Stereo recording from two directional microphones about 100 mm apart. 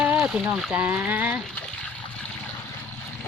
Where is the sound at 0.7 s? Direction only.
15° right (ahead or behind).